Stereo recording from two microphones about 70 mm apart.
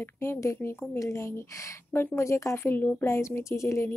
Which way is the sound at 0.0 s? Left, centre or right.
Left.